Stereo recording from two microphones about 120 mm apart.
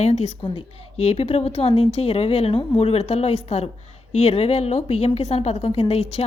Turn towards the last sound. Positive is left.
turn(degrees=60)  # may be behind; listen again after turning